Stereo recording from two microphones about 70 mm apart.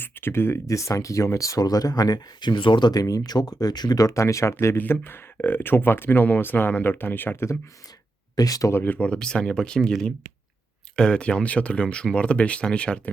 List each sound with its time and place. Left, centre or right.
0.0 s speech: left
4.8 s speech: left
8.4 s speech: left
8.7 s speech: left
9.0 s speech: centre